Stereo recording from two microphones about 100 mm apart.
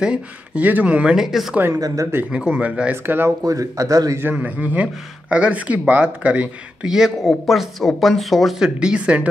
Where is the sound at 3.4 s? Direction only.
35° right (ahead or behind).